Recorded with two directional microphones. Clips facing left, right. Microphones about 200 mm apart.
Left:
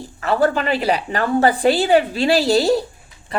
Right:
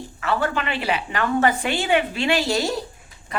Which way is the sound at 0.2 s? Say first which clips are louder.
Left 6 dB; 35° left (ahead or behind).